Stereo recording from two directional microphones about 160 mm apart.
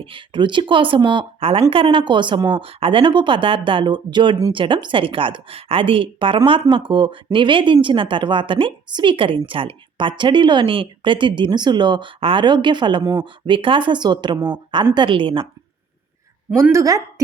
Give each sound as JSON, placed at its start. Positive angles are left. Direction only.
{"t": 0.0, "sound": "a woman's voice", "side_deg": -30}
{"t": 16.6, "sound": "speech", "side_deg": -15}